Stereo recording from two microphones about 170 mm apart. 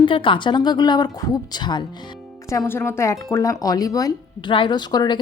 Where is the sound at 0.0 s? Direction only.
30° left (ahead or behind).